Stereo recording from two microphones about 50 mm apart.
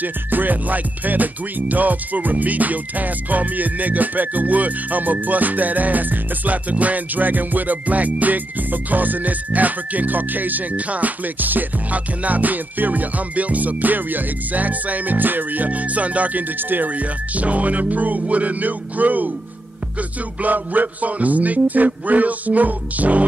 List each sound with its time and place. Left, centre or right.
0.0 s music: right
20.4 s music: right